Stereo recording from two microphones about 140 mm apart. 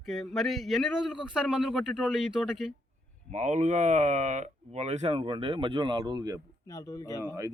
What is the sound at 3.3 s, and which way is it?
Speech, 55° right (ahead or behind).